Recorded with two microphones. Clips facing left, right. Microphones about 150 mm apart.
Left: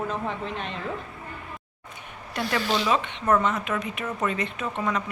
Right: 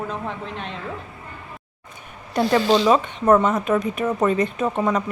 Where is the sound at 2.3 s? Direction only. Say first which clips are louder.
Right 9 dB; 35° right (ahead or behind).